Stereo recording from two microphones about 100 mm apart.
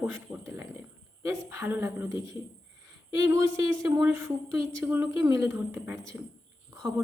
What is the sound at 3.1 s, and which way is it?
A woman's voice, 35° right (ahead or behind).